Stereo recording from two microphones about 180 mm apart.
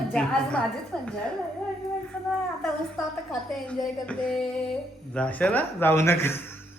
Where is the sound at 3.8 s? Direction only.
5° left (ahead or behind).